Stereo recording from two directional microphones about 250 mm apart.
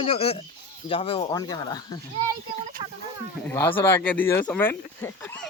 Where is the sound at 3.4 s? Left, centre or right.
Centre.